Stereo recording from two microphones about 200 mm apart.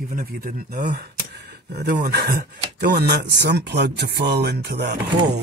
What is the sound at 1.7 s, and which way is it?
Speech, 50° right (ahead or behind).